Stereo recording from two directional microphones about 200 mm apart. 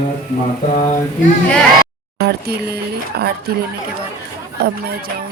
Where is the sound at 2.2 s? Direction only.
55° right (ahead or behind).